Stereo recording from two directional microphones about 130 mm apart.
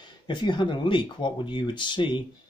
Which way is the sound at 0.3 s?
35° left (ahead or behind).